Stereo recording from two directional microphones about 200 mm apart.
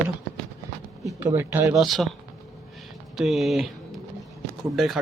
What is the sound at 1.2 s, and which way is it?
Speech, 10° right (ahead or behind).